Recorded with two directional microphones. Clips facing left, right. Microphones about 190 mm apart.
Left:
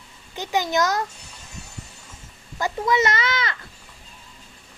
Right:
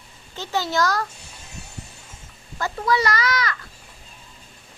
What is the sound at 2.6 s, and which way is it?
Speech, 20° left (ahead or behind).